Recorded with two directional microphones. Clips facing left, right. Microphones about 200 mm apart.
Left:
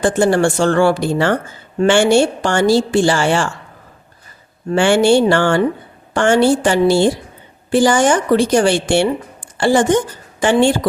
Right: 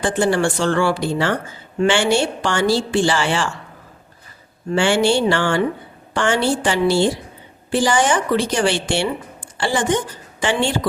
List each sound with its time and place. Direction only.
0.0 s speech: 45° left (ahead or behind)
4.7 s speech: 50° left (ahead or behind)